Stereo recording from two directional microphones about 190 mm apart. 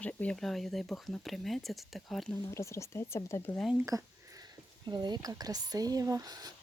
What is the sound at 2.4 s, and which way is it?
Speech, 15° left (ahead or behind).